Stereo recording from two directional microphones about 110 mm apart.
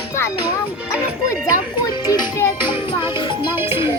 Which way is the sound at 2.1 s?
25° left (ahead or behind).